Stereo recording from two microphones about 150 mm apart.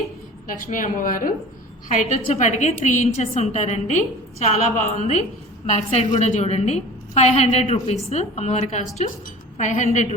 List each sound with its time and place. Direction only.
0.4 s a woman's voice: 60° left (ahead or behind)
1.9 s a woman's voice: 50° left (ahead or behind)